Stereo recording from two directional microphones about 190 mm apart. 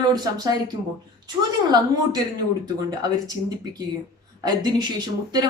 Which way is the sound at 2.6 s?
20° right (ahead or behind).